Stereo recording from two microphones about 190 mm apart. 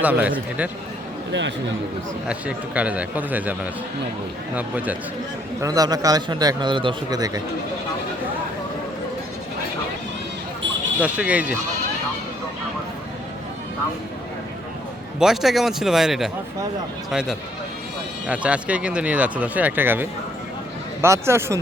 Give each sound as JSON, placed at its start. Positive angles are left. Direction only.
{"t": 0.0, "sound": "speech", "side_deg": -10}
{"t": 1.3, "sound": "a man's voice", "side_deg": -70}
{"t": 2.2, "sound": "speech", "side_deg": -5}
{"t": 5.6, "sound": "a man's voice", "side_deg": -20}
{"t": 11.0, "sound": "speech", "side_deg": -5}
{"t": 15.2, "sound": "speech", "side_deg": 0}